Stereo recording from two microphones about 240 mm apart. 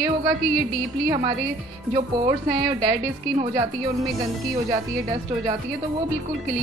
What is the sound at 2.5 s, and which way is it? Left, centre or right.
A woman's voice, centre.